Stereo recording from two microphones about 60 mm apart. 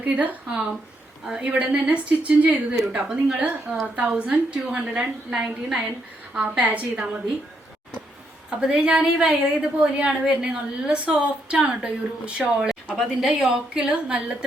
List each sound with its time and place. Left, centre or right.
0.0 s a woman's voice: right
2.9 s a woman's voice: centre
3.3 s a woman's voice: right
6.3 s a woman's voice: right
6.9 s a woman's voice: centre
8.4 s a woman's voice: centre